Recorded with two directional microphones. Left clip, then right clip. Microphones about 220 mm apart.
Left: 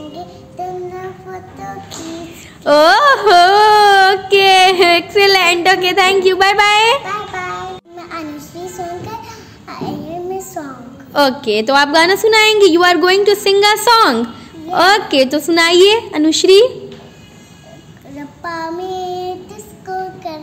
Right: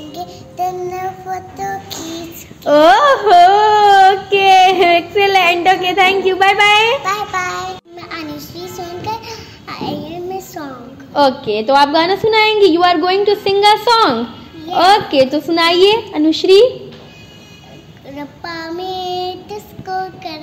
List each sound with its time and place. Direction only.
0.1 s music: 15° left (ahead or behind)
2.6 s a sound: 35° left (ahead or behind)
7.1 s child singing: 15° left (ahead or behind)
11.1 s a woman's voice: 45° left (ahead or behind)
18.4 s child singing: 15° left (ahead or behind)